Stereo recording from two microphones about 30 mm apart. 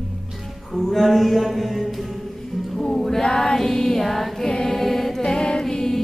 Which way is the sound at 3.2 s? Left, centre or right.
Left.